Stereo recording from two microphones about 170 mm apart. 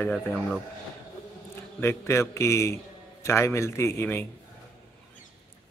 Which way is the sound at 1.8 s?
15° left (ahead or behind).